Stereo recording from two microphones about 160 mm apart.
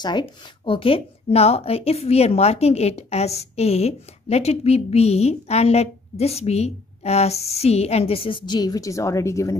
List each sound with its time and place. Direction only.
0.0 s speech: 30° left (ahead or behind)